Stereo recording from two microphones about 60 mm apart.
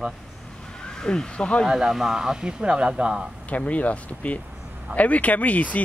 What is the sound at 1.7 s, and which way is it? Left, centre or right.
Speech, centre.